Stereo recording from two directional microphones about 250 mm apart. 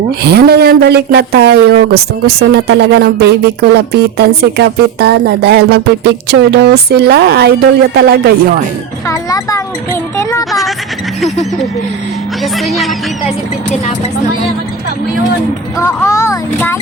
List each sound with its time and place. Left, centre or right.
0.2 s speech: right
9.0 s music: centre
12.4 s music: centre
15.8 s speech: centre